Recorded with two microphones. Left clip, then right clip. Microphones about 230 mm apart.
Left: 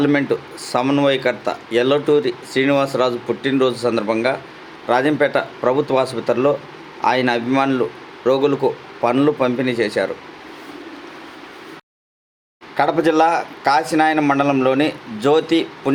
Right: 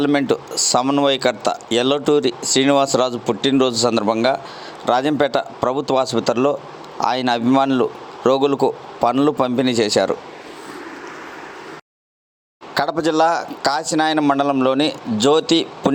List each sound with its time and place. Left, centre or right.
0.0 s speech: right
12.7 s speech: right